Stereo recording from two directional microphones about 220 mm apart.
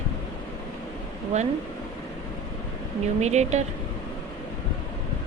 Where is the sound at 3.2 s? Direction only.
30° right (ahead or behind).